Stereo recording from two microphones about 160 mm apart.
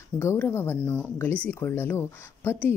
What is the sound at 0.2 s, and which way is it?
Speech, 15° left (ahead or behind).